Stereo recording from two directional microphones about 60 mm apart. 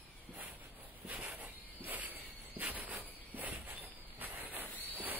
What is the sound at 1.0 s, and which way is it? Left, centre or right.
Cricket, right.